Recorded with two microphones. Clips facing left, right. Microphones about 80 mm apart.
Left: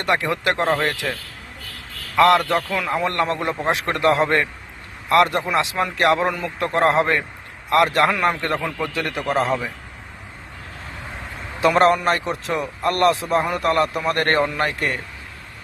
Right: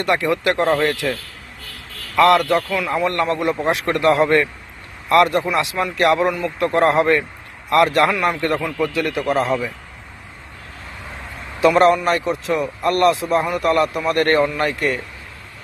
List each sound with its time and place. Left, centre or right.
0.0 s a man's voice: left
2.1 s a man's voice: left
11.6 s speech: left